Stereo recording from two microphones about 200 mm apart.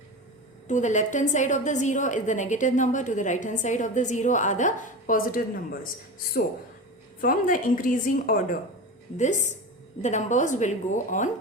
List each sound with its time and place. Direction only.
0.7 s a woman's voice: 35° left (ahead or behind)
7.2 s a woman's voice: 40° left (ahead or behind)